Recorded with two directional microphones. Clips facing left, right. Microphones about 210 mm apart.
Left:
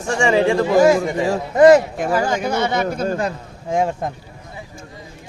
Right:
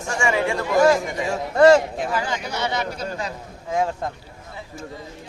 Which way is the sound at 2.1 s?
45° left (ahead or behind).